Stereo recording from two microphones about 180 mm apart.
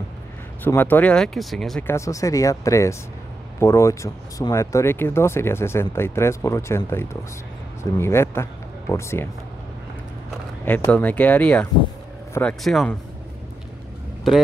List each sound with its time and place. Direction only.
0.7 s speech: 10° left (ahead or behind)
1.9 s speech: 15° left (ahead or behind)
10.6 s speech: 10° left (ahead or behind)